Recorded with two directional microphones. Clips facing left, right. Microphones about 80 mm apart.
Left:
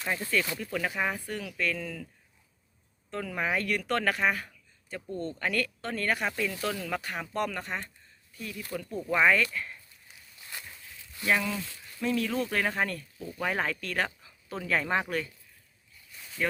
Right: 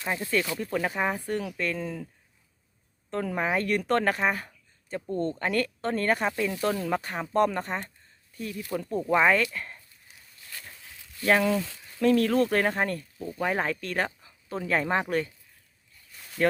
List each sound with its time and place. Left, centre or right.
0.0 s speech: centre
0.5 s speech: right
3.1 s speech: right
11.3 s speech: right
11.5 s speech: right
12.7 s speech: right
13.3 s speech: right
16.4 s speech: right